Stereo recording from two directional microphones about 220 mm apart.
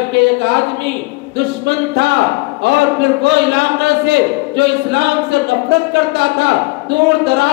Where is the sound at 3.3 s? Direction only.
50° right (ahead or behind).